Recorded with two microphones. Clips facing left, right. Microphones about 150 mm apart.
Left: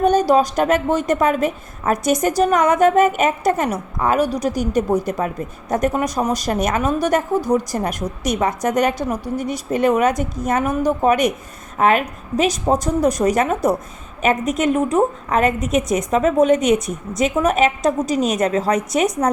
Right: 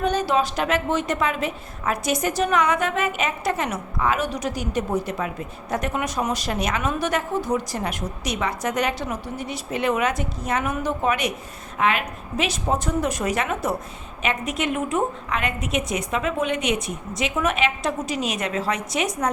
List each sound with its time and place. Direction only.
0.0 s a woman's voice: 45° left (ahead or behind)